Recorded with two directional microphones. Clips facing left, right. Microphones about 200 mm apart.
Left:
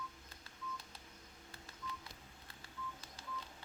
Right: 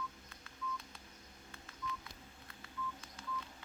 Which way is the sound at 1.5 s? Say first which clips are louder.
Right 4 dB; 30° left (ahead or behind).